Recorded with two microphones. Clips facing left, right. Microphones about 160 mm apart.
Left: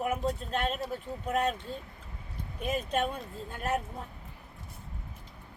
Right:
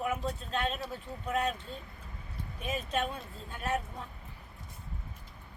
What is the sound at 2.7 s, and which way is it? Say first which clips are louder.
Speech: left 3 dB; 40° left (ahead or behind).